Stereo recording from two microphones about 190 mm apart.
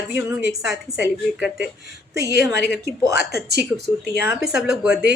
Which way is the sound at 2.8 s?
15° right (ahead or behind).